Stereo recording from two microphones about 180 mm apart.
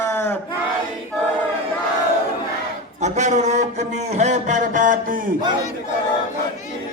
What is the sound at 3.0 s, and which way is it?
A man's voice, 40° right (ahead or behind).